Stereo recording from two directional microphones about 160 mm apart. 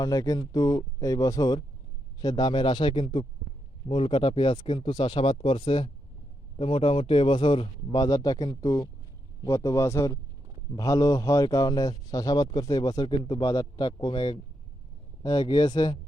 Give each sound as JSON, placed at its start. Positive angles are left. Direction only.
{"t": 0.0, "sound": "a man's voice", "side_deg": 20}